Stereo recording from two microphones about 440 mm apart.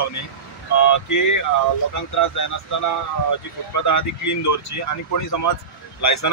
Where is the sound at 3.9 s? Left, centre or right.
Left.